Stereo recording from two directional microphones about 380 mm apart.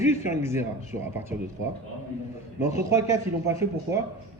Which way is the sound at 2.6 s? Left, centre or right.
Centre.